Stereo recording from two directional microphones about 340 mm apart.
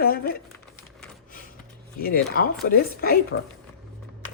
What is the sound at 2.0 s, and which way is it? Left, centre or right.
Speech, left.